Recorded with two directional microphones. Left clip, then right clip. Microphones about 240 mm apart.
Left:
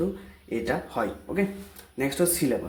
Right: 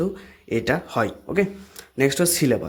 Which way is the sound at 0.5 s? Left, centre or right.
Right.